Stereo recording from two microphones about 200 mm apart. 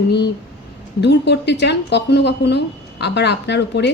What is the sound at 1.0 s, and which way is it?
A woman's voice, 60° left (ahead or behind).